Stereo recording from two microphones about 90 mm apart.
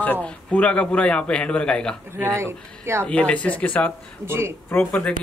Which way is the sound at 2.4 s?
30° right (ahead or behind).